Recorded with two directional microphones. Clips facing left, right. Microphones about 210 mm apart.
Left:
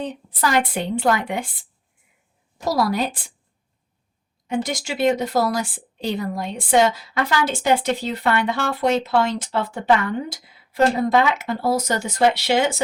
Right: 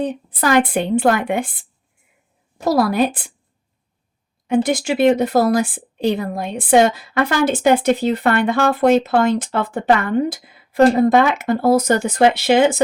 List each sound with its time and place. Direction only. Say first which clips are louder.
0.0 s a woman's voice: right 4 dB; 55° right (ahead or behind)
2.6 s a woman's voice: right 5 dB; 55° right (ahead or behind)
4.4 s speech: right 8 dB; 55° right (ahead or behind)